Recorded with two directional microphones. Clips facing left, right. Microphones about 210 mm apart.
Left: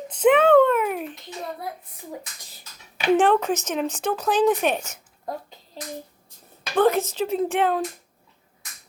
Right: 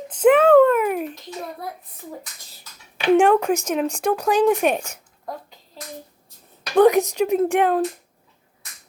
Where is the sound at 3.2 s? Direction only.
10° right (ahead or behind).